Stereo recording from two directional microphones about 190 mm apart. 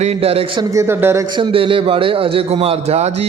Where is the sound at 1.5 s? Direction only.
30° right (ahead or behind).